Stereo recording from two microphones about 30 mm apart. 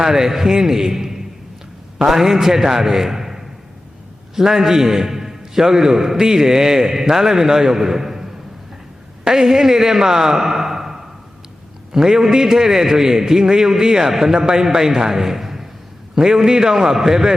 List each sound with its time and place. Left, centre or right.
0.0 s a man's voice: centre